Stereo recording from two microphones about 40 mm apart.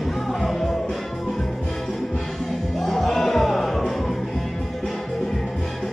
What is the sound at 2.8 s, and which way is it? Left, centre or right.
Music, centre.